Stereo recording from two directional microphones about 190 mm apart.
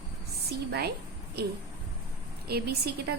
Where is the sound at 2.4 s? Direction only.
55° right (ahead or behind).